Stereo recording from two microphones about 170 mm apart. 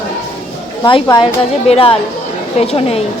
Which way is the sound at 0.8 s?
30° left (ahead or behind).